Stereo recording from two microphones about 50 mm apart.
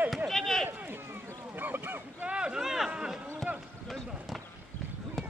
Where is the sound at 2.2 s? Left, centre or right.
Centre.